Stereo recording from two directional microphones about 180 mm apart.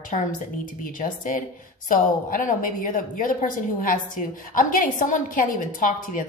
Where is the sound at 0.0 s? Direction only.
50° left (ahead or behind).